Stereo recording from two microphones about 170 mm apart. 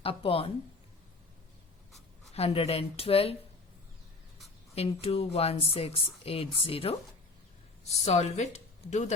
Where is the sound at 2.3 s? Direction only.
35° left (ahead or behind).